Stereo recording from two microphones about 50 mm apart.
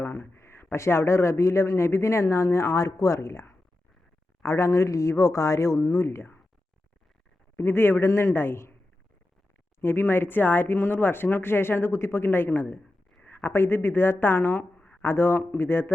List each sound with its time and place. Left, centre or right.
0.0 s speech: left
7.5 s speech: left
9.8 s speech: left